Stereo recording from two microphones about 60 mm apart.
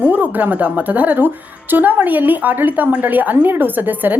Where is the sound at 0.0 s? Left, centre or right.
Right.